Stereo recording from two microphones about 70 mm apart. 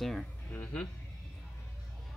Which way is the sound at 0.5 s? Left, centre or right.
Centre.